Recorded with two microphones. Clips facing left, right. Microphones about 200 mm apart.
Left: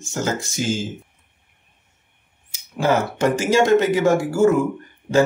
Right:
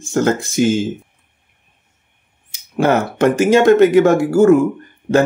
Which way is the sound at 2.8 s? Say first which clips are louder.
Right 5 dB; 60° right (ahead or behind).